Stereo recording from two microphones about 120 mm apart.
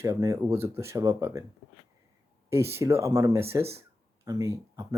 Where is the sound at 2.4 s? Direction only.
20° right (ahead or behind).